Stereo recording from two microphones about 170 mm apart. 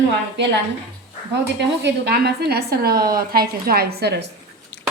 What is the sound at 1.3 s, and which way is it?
Speech, 90° right.